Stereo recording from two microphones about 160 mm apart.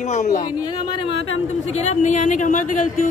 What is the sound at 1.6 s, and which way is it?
A man's voice, 45° left (ahead or behind).